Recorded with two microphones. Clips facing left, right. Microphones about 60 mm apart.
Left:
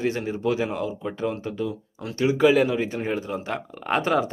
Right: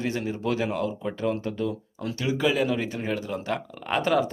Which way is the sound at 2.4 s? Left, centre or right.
Left.